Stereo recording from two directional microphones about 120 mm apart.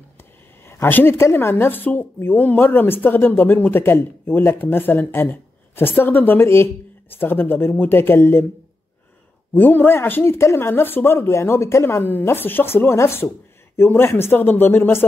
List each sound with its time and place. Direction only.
0.2 s a woman's voice: 20° left (ahead or behind)
9.5 s speech: 15° left (ahead or behind)